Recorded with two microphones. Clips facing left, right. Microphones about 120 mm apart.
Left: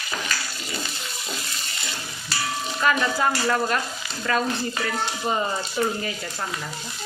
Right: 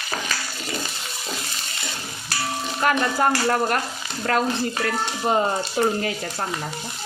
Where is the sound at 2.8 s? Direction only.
45° right (ahead or behind).